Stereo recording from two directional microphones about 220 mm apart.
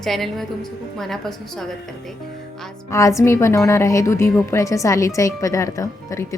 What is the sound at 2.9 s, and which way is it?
A woman's voice, 15° left (ahead or behind).